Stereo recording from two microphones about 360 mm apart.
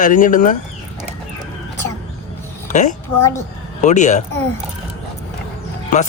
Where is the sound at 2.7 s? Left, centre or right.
Centre.